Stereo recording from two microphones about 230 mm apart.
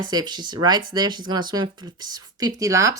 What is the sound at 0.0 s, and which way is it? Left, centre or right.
Speech, centre.